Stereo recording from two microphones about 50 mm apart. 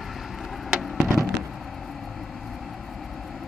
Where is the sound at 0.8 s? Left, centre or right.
Centre.